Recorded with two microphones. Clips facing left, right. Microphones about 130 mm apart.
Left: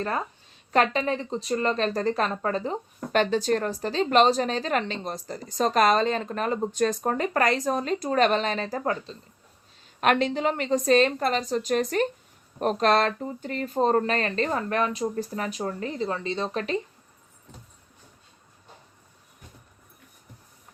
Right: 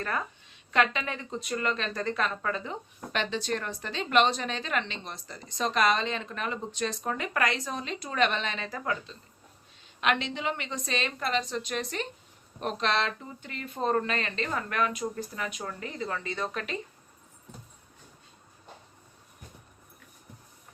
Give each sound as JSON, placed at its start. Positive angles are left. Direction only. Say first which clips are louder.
{"t": 0.0, "sound": "a woman's voice", "louder": "left 4 dB", "side_deg": 30}